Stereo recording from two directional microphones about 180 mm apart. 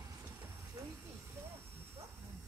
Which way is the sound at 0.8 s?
20° right (ahead or behind).